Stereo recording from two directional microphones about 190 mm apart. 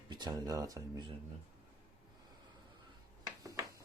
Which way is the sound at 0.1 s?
20° right (ahead or behind).